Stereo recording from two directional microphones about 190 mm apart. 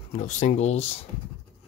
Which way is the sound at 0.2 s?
35° left (ahead or behind).